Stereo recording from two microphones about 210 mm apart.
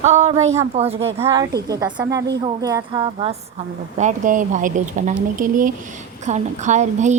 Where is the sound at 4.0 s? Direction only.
35° right (ahead or behind).